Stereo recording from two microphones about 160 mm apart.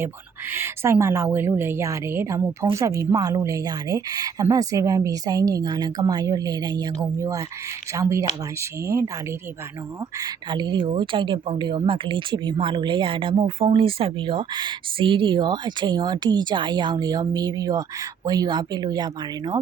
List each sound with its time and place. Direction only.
0.5 s a woman's voice: 15° right (ahead or behind)
10.2 s speech: 25° right (ahead or behind)